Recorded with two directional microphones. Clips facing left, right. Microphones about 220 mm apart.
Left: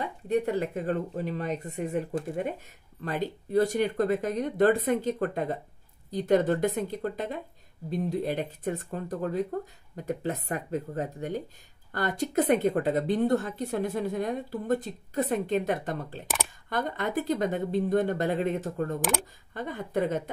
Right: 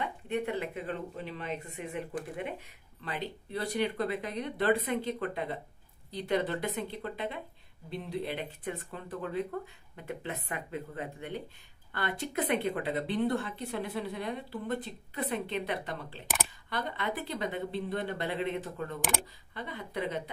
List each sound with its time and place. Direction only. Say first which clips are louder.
0.0 s a woman's voice: left 6 dB; 40° left (ahead or behind)